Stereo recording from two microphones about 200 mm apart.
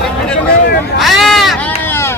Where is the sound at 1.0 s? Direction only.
Centre (ahead or behind).